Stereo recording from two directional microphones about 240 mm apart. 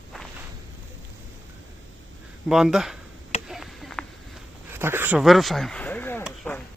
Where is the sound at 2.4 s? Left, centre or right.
Centre.